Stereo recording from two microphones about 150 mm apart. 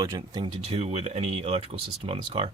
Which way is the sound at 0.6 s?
45° right (ahead or behind).